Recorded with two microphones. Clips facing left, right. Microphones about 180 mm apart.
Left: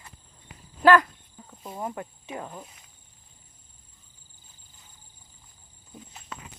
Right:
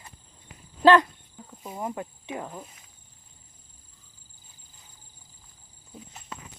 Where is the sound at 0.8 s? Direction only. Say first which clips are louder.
Right 1 dB; 25° right (ahead or behind).